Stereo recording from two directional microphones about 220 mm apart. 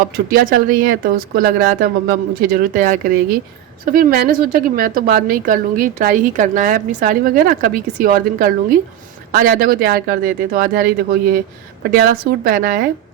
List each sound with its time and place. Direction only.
0.3 s a woman's voice: 40° right (ahead or behind)